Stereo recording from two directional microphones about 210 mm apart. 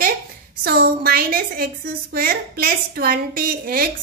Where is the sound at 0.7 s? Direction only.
45° right (ahead or behind).